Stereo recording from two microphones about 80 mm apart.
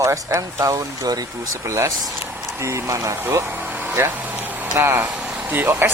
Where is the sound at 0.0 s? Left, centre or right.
Right.